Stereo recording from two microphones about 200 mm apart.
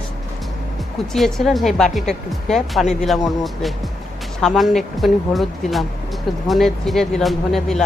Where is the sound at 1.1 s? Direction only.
Centre (ahead or behind).